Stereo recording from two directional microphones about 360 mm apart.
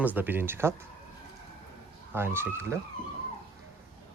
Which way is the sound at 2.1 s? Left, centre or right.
Centre.